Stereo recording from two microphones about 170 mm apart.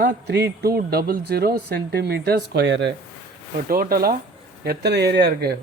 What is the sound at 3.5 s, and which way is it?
Speech, 55° right (ahead or behind).